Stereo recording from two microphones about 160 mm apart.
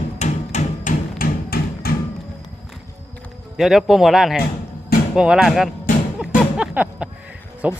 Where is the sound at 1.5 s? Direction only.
75° left (ahead or behind).